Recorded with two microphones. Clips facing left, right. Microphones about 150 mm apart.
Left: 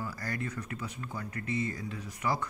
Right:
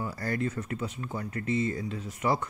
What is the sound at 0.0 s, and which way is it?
Speech, 30° right (ahead or behind).